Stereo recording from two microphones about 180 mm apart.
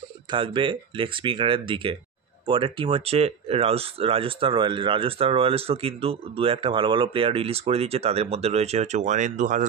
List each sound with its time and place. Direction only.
0.3 s speech: 25° right (ahead or behind); by 9.7 s 45° right (ahead or behind)